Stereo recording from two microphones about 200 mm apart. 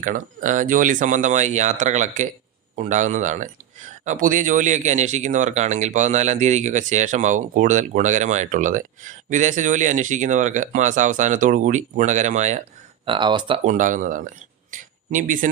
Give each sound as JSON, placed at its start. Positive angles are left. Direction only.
{"t": 0.0, "sound": "speech", "side_deg": -40}
{"t": 13.1, "sound": "speech", "side_deg": -25}
{"t": 13.7, "sound": "speech", "side_deg": -40}